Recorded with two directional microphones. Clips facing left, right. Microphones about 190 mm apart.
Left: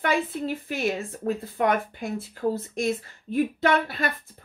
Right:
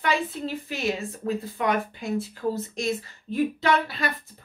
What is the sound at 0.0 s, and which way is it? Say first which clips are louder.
A woman's voice: left 1 dB; 50° left (ahead or behind).